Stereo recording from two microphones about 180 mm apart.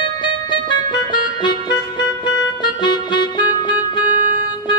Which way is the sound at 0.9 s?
25° left (ahead or behind).